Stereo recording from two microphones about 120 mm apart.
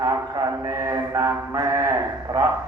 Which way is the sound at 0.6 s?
25° right (ahead or behind).